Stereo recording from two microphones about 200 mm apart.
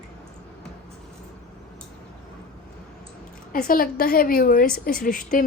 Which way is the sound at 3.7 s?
45° left (ahead or behind).